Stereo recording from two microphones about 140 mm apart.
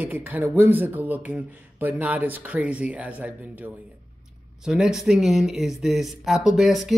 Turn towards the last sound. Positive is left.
turn(degrees=0)  # may be behind; listen again after turning